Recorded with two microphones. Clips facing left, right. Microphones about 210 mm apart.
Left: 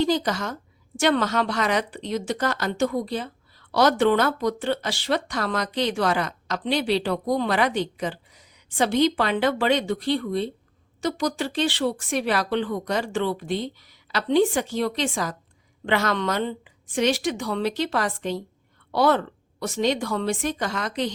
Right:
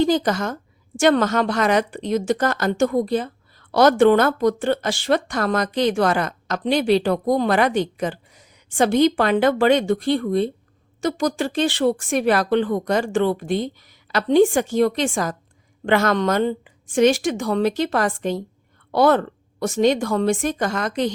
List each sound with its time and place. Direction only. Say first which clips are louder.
0.0 s a woman's voice: right 4 dB; 50° right (ahead or behind)